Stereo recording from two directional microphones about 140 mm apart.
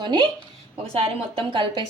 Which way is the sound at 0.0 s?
35° right (ahead or behind).